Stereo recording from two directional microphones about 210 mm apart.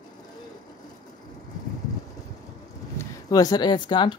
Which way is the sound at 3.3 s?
15° left (ahead or behind).